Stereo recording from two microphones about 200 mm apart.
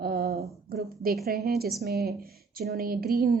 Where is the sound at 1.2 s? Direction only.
50° right (ahead or behind).